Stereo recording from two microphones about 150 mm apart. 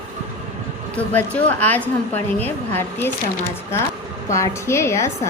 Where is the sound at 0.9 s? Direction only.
10° left (ahead or behind).